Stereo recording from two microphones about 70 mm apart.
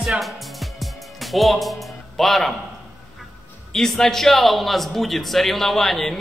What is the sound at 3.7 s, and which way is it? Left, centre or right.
A man's voice, centre.